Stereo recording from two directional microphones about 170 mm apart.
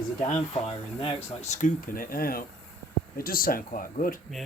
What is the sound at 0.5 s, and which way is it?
Speech, 35° left (ahead or behind).